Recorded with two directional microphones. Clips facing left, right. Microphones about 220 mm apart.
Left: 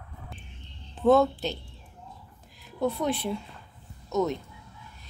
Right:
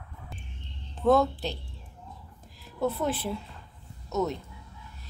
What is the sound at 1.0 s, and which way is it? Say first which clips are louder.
Speech: left 2 dB; centre (ahead or behind).